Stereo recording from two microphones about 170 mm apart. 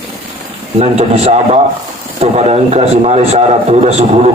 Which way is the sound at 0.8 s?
40° right (ahead or behind).